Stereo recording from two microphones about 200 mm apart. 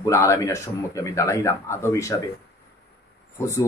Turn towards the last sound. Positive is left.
turn(degrees=15)  # may be behind; listen again after turning